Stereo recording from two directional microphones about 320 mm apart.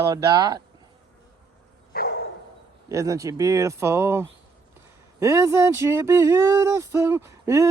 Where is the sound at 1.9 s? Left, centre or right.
Left.